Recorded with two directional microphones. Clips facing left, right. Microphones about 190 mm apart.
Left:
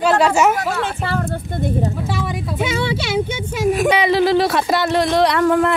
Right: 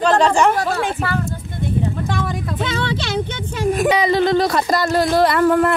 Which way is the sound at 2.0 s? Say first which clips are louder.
Even; 5° left (ahead or behind).